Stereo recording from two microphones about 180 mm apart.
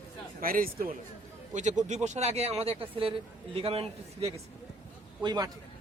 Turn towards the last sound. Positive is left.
turn(degrees=-25)  # may be behind; listen again after turning